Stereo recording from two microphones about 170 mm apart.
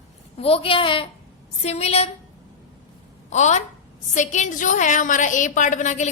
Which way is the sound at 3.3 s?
45° left (ahead or behind).